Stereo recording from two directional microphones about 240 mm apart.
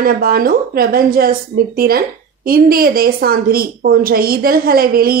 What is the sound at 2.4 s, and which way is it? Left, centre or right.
A woman's voice, right.